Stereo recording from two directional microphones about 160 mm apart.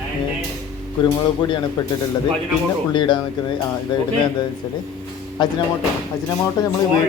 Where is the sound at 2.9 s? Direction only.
30° left (ahead or behind).